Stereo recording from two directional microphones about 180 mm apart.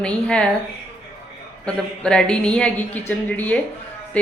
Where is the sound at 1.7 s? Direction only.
5° left (ahead or behind).